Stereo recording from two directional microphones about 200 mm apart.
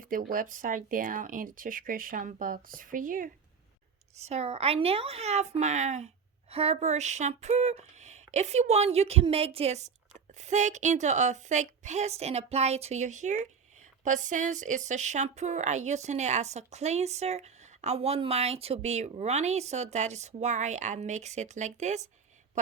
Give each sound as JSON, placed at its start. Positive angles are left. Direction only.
{"t": 0.0, "sound": "speech", "side_deg": -45}